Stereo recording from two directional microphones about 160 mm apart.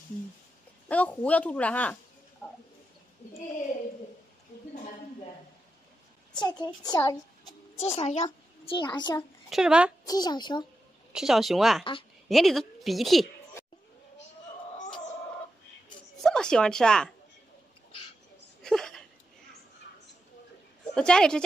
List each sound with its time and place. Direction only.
0.8 s speech: 10° left (ahead or behind)
6.4 s a child's voice: 25° left (ahead or behind)
7.8 s a child's voice: 45° left (ahead or behind)
8.7 s a woman's voice: 30° left (ahead or behind)
9.5 s a woman's voice: 5° right (ahead or behind)
10.0 s a woman's voice: 25° left (ahead or behind)
11.1 s a woman's voice: centre (ahead or behind)
16.2 s speech: 5° left (ahead or behind)
18.6 s a sound: 5° left (ahead or behind)
20.9 s a woman's voice: 5° left (ahead or behind)